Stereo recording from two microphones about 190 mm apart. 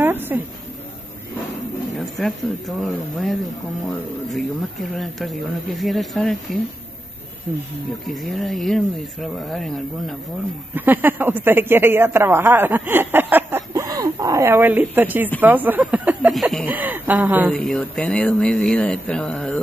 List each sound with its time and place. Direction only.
0.0 s a sound: 10° right (ahead or behind)
2.0 s speech: centre (ahead or behind)
4.9 s speech: centre (ahead or behind)
8.1 s speech: centre (ahead or behind)
10.7 s speech: 10° right (ahead or behind)
17.6 s speech: 5° left (ahead or behind)